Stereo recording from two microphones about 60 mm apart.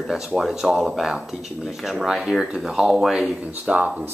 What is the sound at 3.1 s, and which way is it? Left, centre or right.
Speech, right.